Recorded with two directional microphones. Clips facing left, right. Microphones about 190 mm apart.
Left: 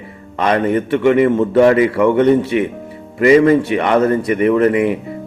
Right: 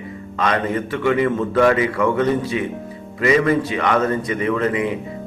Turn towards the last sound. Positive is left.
turn(degrees=30)  # may be behind; listen again after turning